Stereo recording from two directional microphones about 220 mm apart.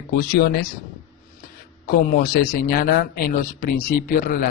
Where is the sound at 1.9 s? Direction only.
40° left (ahead or behind).